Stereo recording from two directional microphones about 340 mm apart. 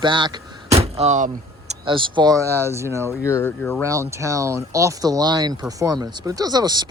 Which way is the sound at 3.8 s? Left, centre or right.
Centre.